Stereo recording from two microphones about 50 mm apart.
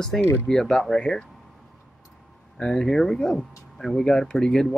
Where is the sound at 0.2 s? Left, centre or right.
Left.